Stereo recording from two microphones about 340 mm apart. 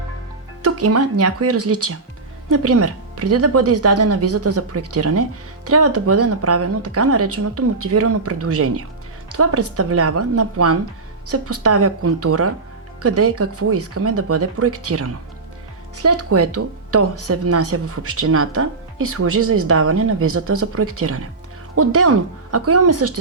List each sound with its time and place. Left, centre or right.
0.6 s speech: right